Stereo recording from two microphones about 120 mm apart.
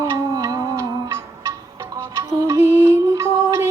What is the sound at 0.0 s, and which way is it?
Music, 30° right (ahead or behind).